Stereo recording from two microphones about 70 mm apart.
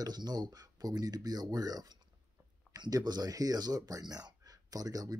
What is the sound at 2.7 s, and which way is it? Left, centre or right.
Speech, right.